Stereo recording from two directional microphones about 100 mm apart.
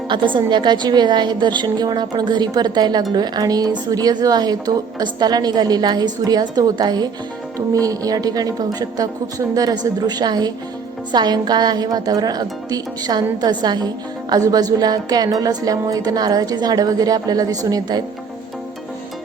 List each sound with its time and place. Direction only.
0.1 s a woman's voice: 50° right (ahead or behind)